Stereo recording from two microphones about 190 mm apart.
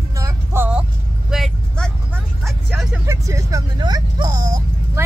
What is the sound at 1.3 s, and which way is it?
Vehicle, centre (ahead or behind).